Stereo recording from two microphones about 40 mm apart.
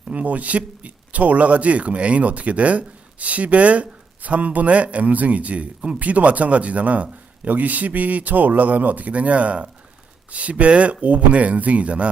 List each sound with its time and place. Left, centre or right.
0.1 s speech: right